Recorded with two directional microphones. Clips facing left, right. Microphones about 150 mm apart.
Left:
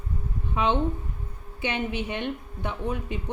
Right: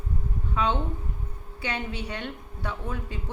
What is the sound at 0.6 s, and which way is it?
A woman's voice, 20° left (ahead or behind).